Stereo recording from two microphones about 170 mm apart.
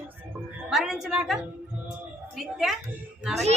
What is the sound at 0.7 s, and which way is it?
Speech, centre (ahead or behind).